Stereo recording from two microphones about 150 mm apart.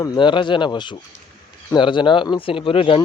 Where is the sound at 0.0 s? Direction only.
30° left (ahead or behind).